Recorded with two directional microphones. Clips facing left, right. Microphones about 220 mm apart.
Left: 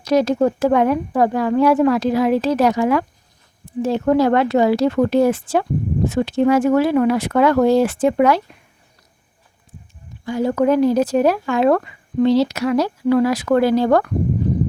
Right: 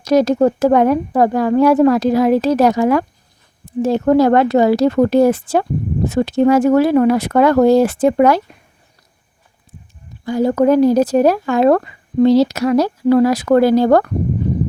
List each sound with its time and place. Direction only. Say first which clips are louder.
0.0 s speech: right 3 dB; 40° right (ahead or behind)
10.2 s speech: right 4 dB; 40° right (ahead or behind)